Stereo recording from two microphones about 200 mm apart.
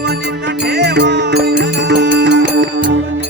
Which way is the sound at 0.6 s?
60° right (ahead or behind).